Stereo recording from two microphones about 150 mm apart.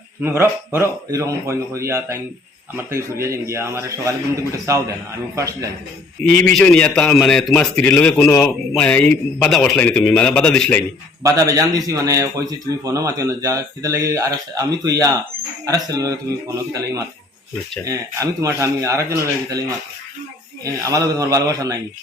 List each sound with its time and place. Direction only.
0.2 s a man's voice: 15° right (ahead or behind)
6.4 s a man's voice: 5° left (ahead or behind)
11.2 s a man's voice: 20° right (ahead or behind)
20.7 s a man's voice: 20° right (ahead or behind)